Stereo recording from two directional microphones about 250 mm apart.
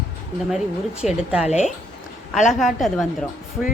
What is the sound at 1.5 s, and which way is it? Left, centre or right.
Speech, left.